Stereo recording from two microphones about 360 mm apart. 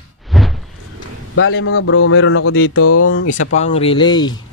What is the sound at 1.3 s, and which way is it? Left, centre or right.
Speech, left.